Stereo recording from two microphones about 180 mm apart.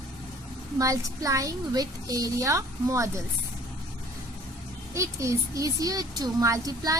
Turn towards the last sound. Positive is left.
turn(degrees=-20)  # may be behind; listen again after turning